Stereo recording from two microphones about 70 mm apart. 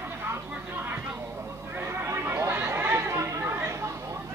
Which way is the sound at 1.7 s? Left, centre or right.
Right.